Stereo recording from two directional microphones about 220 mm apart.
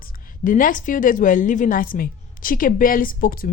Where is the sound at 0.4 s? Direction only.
40° left (ahead or behind).